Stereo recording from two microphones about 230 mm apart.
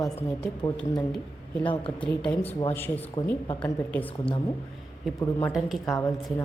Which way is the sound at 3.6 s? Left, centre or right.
Centre.